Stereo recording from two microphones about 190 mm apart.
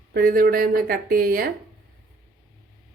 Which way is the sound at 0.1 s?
50° right (ahead or behind).